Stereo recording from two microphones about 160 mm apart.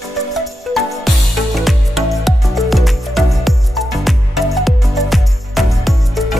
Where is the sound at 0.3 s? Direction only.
Centre (ahead or behind).